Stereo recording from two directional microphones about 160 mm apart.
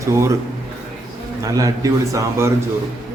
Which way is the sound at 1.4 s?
20° right (ahead or behind).